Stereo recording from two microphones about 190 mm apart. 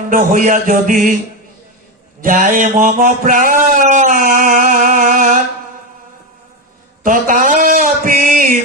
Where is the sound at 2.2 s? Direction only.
45° right (ahead or behind).